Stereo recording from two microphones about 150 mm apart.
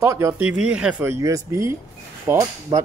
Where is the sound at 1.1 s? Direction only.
20° right (ahead or behind).